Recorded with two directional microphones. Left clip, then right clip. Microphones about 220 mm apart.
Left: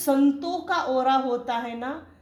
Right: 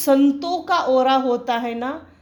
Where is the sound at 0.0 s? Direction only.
40° right (ahead or behind).